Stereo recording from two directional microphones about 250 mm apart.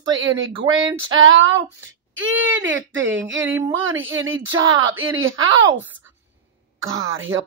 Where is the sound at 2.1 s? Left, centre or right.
Right.